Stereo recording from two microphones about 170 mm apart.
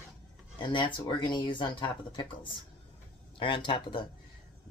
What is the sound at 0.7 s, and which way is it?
Speech, 30° left (ahead or behind).